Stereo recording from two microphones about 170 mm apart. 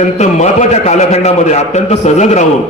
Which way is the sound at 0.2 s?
40° left (ahead or behind).